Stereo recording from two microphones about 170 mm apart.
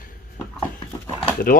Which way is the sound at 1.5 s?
55° left (ahead or behind).